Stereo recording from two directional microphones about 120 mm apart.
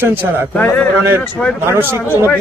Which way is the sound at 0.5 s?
10° left (ahead or behind).